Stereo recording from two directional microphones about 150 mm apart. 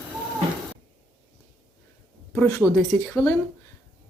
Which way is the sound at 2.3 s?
15° left (ahead or behind).